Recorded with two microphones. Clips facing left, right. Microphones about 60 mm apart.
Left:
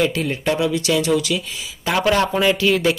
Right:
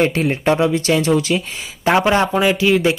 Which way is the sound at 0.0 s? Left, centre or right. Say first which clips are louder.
Right 3 dB; right.